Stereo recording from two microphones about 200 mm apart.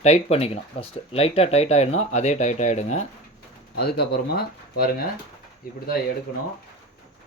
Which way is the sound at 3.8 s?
55° left (ahead or behind).